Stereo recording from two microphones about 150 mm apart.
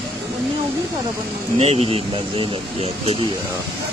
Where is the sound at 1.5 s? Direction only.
45° right (ahead or behind).